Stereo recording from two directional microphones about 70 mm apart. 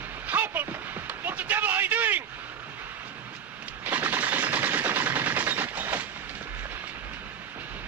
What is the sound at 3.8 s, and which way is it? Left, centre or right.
Machine gun, right.